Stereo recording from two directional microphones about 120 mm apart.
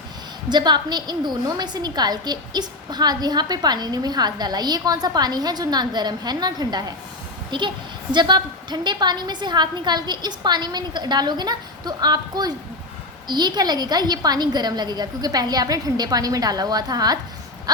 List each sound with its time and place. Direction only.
0.5 s a woman's voice: 35° right (ahead or behind)